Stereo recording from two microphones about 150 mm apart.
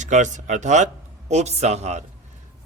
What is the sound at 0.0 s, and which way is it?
Speech, 55° right (ahead or behind).